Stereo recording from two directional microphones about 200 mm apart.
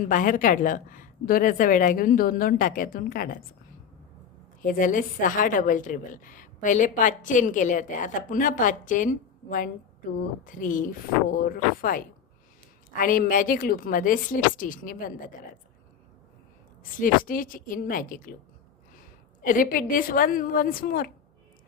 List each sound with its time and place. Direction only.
0.1 s speech: 40° left (ahead or behind)
4.6 s a woman's voice: 40° left (ahead or behind)
17.0 s speech: 45° left (ahead or behind)
19.4 s speech: 45° left (ahead or behind)